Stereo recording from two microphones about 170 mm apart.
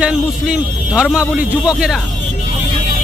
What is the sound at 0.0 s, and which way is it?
A man's voice, 5° right (ahead or behind).